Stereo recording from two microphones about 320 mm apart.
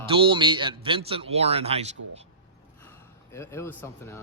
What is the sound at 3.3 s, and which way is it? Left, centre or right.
Speech, centre.